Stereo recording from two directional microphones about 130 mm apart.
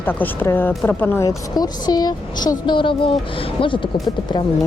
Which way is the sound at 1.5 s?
30° left (ahead or behind).